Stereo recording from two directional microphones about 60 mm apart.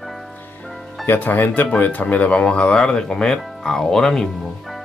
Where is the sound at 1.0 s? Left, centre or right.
Left; by 4.8 s centre.